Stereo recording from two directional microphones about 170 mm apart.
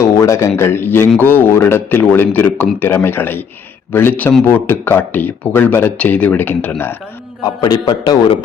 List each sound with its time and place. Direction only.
0.0 s a man's voice: 15° left (ahead or behind)
7.4 s a man's voice: 25° left (ahead or behind)